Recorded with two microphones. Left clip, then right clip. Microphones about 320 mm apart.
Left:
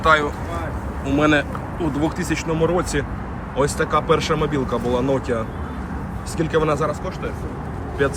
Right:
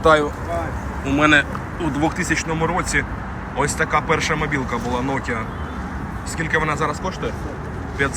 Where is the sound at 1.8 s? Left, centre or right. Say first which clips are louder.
Right 2 dB; centre.